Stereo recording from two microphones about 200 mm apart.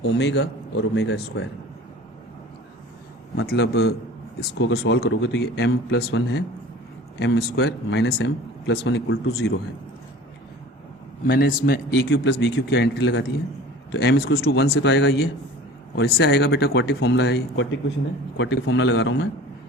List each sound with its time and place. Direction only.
0.0 s speech: 60° left (ahead or behind)
3.4 s speech: 55° left (ahead or behind)
11.3 s speech: 50° left (ahead or behind); by 19.3 s 65° left (ahead or behind)